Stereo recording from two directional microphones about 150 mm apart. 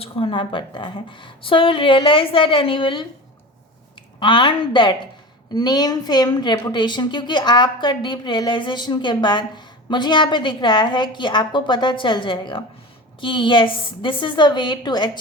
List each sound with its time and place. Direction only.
0.0 s a woman's voice: 35° left (ahead or behind)
4.2 s a woman's voice: 35° left (ahead or behind)